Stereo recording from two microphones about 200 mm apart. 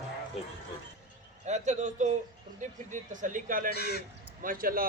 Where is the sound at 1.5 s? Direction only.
35° right (ahead or behind).